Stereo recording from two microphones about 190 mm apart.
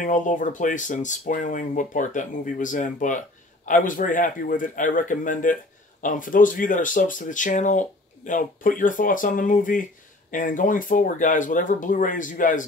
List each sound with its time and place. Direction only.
0.0 s speech: 40° left (ahead or behind)